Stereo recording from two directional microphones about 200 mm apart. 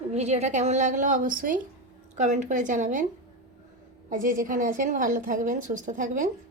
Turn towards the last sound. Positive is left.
turn(degrees=-40)  # may be behind; listen again after turning